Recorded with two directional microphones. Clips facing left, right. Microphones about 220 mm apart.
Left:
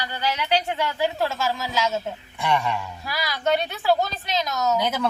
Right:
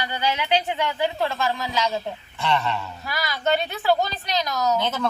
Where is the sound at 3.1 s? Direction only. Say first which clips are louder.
Even; centre (ahead or behind).